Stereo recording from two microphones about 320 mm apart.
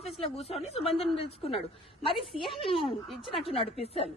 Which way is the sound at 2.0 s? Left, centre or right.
Centre.